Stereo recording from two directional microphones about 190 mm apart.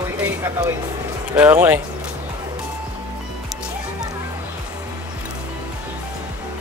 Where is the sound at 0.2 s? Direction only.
15° right (ahead or behind).